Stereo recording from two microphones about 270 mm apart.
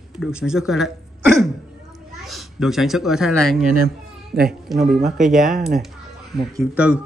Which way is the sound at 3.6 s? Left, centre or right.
Right.